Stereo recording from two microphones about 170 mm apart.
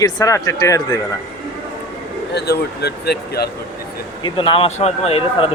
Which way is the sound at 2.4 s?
75° left (ahead or behind).